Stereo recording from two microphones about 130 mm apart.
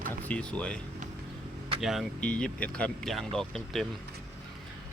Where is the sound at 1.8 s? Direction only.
Centre (ahead or behind).